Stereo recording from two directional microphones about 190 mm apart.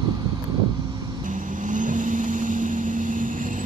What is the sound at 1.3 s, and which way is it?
Vehicle, 40° right (ahead or behind).